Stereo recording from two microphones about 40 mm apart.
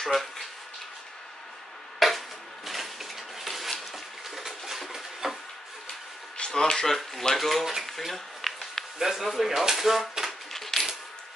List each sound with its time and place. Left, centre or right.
0.0 s speech: centre
2.0 s a sound: centre
6.3 s speech: centre
7.3 s speech: centre
7.8 s a sound: centre
8.9 s speech: centre
10.5 s typewriter: centre